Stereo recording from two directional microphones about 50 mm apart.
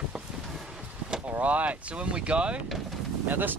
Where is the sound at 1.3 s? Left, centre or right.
Right.